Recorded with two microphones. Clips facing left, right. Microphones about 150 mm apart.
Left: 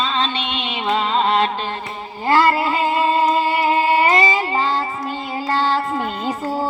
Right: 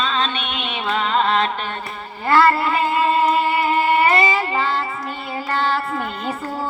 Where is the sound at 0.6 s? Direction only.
15° left (ahead or behind).